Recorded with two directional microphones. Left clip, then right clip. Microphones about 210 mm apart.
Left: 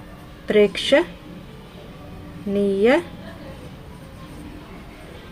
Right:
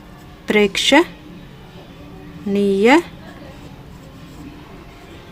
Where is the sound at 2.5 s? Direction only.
55° right (ahead or behind).